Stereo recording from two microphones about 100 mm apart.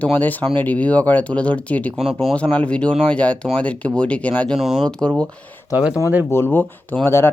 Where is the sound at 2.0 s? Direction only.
Centre (ahead or behind).